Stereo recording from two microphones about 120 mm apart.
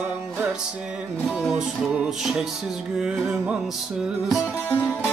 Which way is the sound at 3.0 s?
10° right (ahead or behind).